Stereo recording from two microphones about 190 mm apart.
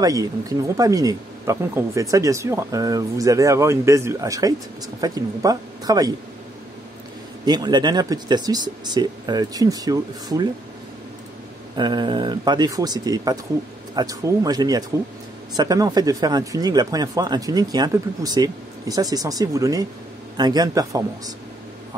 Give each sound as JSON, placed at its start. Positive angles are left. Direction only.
{"t": 0.0, "sound": "speech", "side_deg": -20}
{"t": 7.4, "sound": "speech", "side_deg": -20}
{"t": 11.7, "sound": "speech", "side_deg": -25}